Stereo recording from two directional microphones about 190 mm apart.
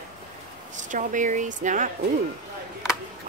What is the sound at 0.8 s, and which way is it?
Speech, 40° right (ahead or behind).